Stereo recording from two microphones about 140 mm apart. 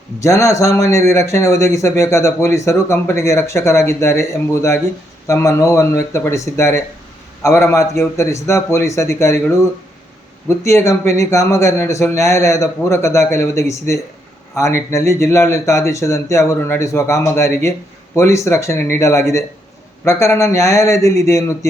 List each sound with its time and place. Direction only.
0.2 s speech: 20° left (ahead or behind)